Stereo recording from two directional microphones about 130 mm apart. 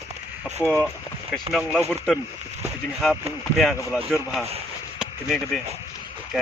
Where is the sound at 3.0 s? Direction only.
5° left (ahead or behind).